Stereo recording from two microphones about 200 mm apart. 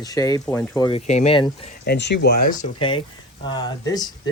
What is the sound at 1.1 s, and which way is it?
Speech, 35° left (ahead or behind).